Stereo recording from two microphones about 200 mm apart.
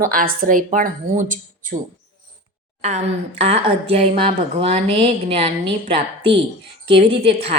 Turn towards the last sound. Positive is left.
turn(degrees=-30)  # may be behind; listen again after turning